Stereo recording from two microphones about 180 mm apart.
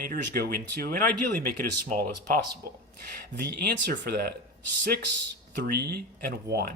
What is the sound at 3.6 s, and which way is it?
Speech, 65° right (ahead or behind).